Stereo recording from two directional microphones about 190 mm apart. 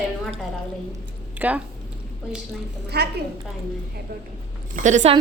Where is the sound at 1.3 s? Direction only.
10° right (ahead or behind).